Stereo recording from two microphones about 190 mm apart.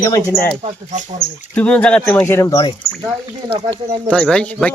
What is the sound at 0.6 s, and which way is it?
Speech, 40° right (ahead or behind).